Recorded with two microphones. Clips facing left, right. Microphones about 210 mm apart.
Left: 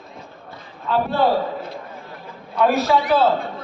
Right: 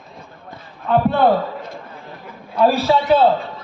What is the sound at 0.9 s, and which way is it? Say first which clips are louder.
Speech: right 4 dB; 55° right (ahead or behind).